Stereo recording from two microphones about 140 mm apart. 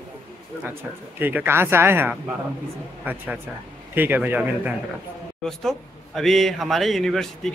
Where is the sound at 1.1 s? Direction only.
15° right (ahead or behind).